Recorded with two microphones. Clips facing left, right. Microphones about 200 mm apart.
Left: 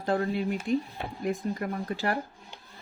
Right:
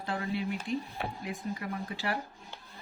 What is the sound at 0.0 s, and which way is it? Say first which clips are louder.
Speech: left 6 dB; 45° left (ahead or behind).